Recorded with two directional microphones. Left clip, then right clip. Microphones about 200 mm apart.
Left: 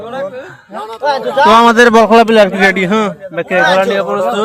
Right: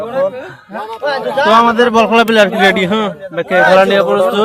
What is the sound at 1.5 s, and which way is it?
Speech, 45° left (ahead or behind).